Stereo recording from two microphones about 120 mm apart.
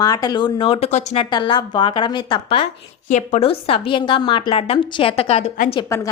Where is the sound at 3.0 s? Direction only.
90° left.